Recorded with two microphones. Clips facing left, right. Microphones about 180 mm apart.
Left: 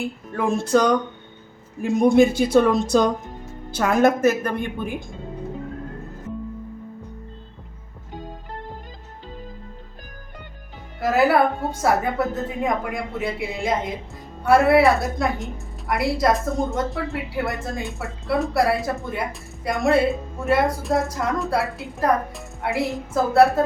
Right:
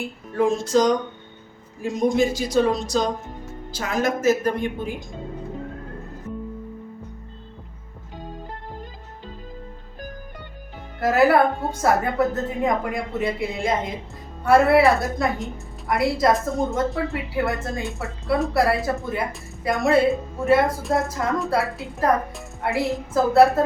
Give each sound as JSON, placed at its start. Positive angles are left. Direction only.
{"t": 0.3, "sound": "a woman's voice", "side_deg": 60}
{"t": 11.0, "sound": "a woman's voice", "side_deg": 0}
{"t": 12.6, "sound": "a woman's voice", "side_deg": 0}